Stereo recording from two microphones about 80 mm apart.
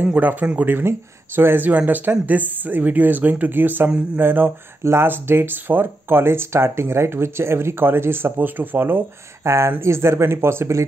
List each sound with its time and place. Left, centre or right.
0.0 s speech: right